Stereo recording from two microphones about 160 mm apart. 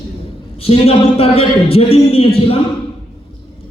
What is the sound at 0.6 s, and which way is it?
A man's voice, 40° left (ahead or behind).